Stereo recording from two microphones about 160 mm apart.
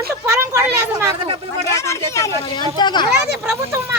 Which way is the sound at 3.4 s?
15° right (ahead or behind).